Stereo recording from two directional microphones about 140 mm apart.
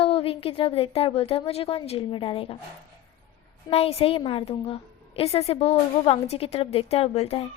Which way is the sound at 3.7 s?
45° left (ahead or behind).